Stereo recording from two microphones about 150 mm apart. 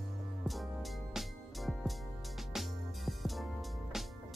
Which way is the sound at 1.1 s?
Centre (ahead or behind).